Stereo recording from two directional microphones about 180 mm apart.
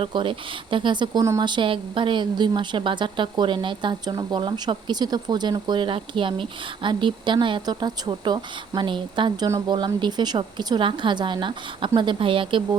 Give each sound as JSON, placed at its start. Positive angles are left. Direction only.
{"t": 0.0, "sound": "speech", "side_deg": -30}